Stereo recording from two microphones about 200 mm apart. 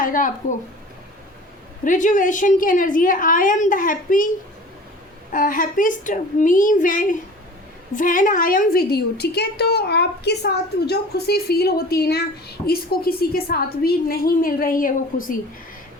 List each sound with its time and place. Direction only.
0.0 s speech: 45° left (ahead or behind)
1.8 s a woman's voice: 40° left (ahead or behind)
5.3 s a woman's voice: 40° left (ahead or behind)